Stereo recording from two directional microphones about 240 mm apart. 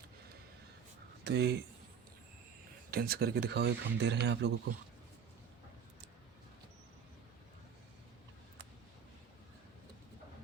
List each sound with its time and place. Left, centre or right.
1.2 s speech: right
2.9 s speech: right